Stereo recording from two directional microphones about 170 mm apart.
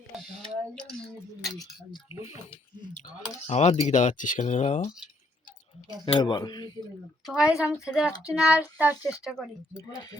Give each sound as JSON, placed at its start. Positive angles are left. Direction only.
{"t": 0.2, "sound": "speech", "side_deg": 5}
{"t": 2.0, "sound": "speech", "side_deg": 35}
{"t": 6.1, "sound": "speech", "side_deg": 25}
{"t": 7.3, "sound": "speech", "side_deg": -5}
{"t": 8.4, "sound": "a sound", "side_deg": -5}
{"t": 9.4, "sound": "speech", "side_deg": 0}
{"t": 9.7, "sound": "speech", "side_deg": 20}